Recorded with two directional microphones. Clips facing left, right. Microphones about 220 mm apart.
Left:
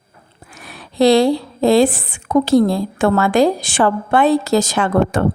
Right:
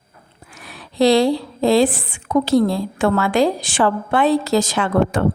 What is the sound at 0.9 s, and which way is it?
A woman's voice, 50° left (ahead or behind).